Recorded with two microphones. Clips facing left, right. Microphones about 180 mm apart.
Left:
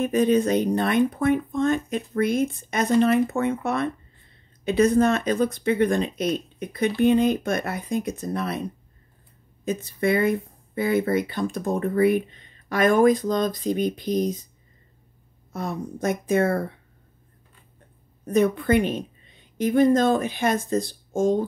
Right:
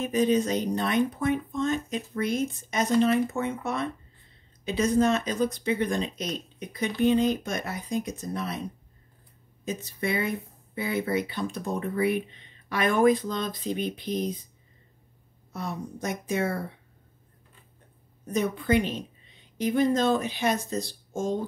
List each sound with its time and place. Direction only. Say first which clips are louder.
0.0 s speech: left 4 dB; 55° left (ahead or behind)
9.7 s speech: left 7 dB; 55° left (ahead or behind)
15.5 s speech: left 4 dB; 50° left (ahead or behind)
18.2 s speech: left 7 dB; 60° left (ahead or behind)